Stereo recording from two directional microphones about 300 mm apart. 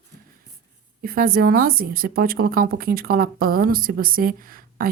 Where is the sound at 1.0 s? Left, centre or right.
Right.